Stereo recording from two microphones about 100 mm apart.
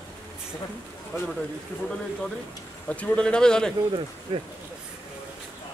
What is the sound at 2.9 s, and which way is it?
Speech, 10° left (ahead or behind).